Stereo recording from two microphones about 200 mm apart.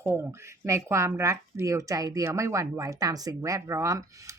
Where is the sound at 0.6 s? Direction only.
15° right (ahead or behind).